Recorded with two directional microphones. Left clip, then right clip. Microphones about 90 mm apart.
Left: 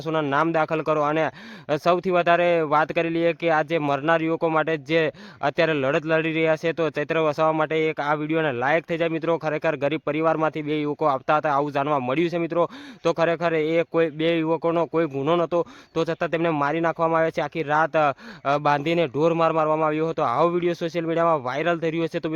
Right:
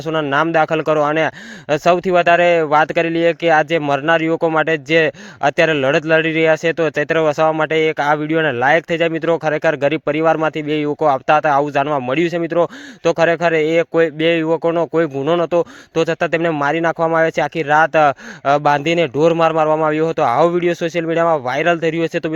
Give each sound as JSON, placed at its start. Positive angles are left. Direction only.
{"t": 0.1, "sound": "a man's voice", "side_deg": -45}
{"t": 15.1, "sound": "speech", "side_deg": -15}
{"t": 15.4, "sound": "speech", "side_deg": -40}